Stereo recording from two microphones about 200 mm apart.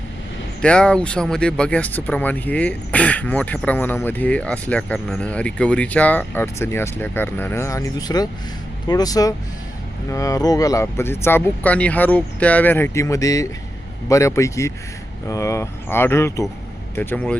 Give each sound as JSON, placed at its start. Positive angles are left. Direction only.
{"t": 0.6, "sound": "speech", "side_deg": 5}